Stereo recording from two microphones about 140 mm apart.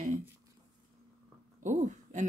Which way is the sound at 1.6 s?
60° right (ahead or behind).